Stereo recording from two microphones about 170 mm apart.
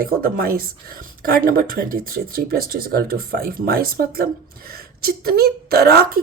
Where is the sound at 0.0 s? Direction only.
60° right (ahead or behind).